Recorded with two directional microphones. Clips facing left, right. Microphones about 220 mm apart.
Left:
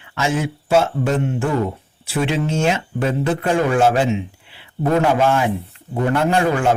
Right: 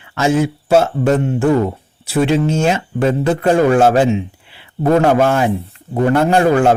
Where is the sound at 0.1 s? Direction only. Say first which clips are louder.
Right 6 dB; 40° right (ahead or behind).